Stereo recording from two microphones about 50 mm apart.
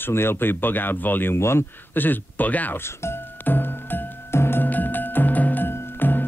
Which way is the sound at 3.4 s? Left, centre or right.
Left.